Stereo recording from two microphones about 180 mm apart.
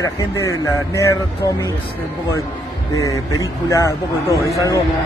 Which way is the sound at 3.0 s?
20° left (ahead or behind).